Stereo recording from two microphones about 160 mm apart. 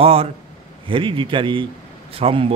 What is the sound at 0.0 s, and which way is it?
Speech, 35° right (ahead or behind).